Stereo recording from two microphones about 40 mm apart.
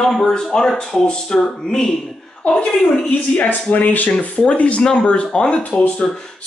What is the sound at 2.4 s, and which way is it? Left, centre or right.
Speech, left.